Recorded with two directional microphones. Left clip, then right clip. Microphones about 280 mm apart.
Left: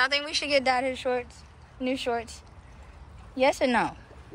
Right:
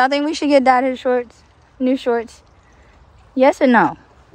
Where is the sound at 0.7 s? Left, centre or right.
Right.